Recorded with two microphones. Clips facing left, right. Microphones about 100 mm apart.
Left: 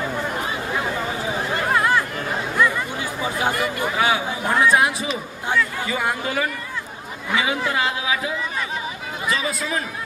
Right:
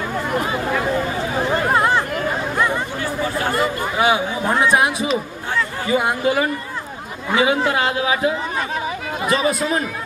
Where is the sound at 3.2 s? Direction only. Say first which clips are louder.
Right 1 dB; 15° left (ahead or behind).